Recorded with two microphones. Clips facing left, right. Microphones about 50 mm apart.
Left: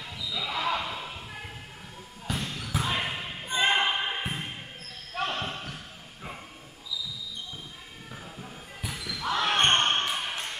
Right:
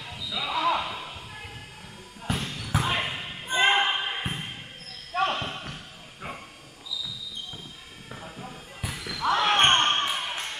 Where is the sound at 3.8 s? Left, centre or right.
Centre.